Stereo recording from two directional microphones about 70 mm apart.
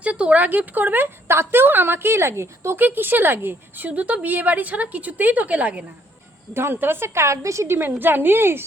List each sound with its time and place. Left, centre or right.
0.0 s a woman's voice: centre; by 2.8 s right
2.8 s a woman's voice: right
6.5 s a woman's voice: right
7.8 s a woman's voice: right